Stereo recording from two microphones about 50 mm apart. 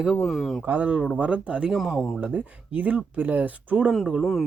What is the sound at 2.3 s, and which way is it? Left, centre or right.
Speech, right.